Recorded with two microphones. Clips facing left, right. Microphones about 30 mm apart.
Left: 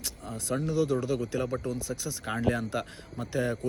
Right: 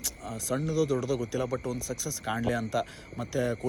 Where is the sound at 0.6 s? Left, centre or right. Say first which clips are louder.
Even; left.